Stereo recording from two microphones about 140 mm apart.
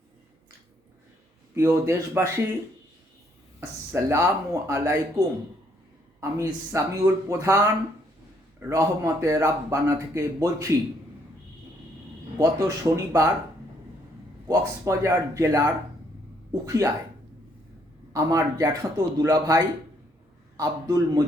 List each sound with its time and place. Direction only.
1.5 s a man's voice: 20° right (ahead or behind)
3.6 s a man's voice: 20° right (ahead or behind)
8.7 s a man's voice: 20° right (ahead or behind)
12.4 s a man's voice: 25° right (ahead or behind)
14.4 s a man's voice: 20° right (ahead or behind)
18.1 s a man's voice: 20° right (ahead or behind)